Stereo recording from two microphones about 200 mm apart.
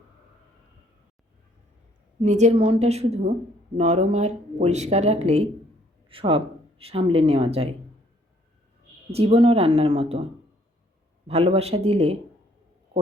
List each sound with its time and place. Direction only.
2.2 s speech: 35° right (ahead or behind)
9.1 s speech: 30° right (ahead or behind)
11.3 s speech: 30° right (ahead or behind)